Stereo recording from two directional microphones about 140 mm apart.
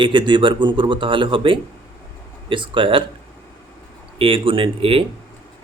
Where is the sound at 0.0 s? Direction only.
35° right (ahead or behind).